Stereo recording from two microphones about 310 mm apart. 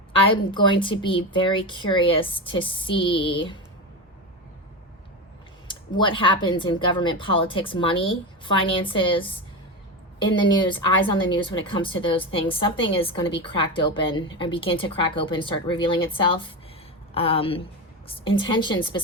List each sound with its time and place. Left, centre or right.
0.1 s a woman's voice: centre
5.6 s a woman's voice: centre